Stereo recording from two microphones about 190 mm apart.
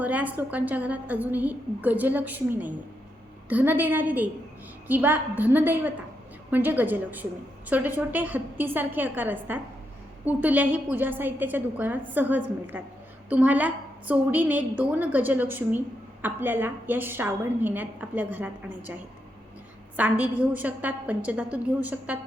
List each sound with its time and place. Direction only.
0.0 s a woman's voice: 10° right (ahead or behind)
20.0 s a woman's voice: 5° right (ahead or behind)